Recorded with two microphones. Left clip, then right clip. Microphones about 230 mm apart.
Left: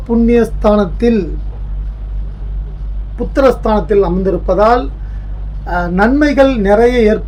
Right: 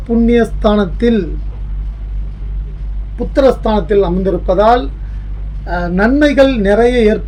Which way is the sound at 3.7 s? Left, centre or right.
Centre.